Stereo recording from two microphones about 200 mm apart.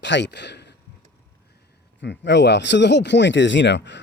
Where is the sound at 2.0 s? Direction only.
60° left (ahead or behind).